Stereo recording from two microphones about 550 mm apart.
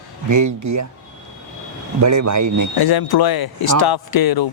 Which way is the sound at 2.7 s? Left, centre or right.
Left.